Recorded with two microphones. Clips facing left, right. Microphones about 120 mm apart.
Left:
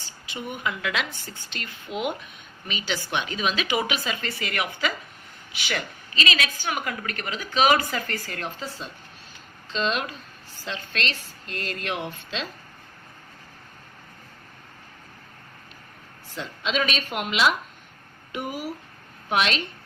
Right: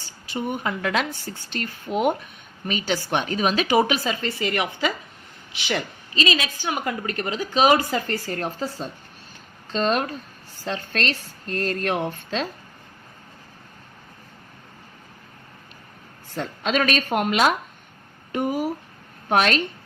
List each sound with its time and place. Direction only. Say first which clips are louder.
0.3 s a woman's voice: right 5 dB; 40° right (ahead or behind)
16.3 s a woman's voice: right 4 dB; 45° right (ahead or behind)